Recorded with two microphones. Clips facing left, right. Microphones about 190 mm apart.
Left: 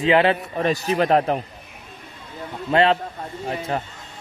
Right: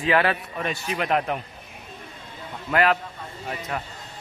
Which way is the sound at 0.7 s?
35° left (ahead or behind).